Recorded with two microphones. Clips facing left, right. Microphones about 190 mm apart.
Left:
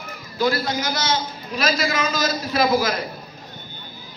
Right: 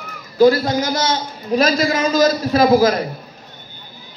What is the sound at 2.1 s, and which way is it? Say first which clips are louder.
Speech: right 8 dB; 45° right (ahead or behind).